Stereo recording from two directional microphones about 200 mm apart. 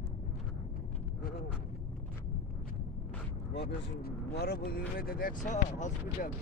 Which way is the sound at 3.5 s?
60° left (ahead or behind).